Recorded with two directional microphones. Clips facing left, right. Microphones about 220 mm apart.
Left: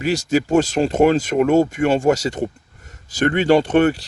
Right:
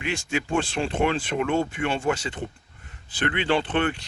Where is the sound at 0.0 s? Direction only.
40° left (ahead or behind).